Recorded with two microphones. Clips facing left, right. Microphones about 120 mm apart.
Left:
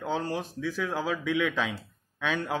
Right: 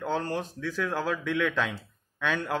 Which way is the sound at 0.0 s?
10° left (ahead or behind).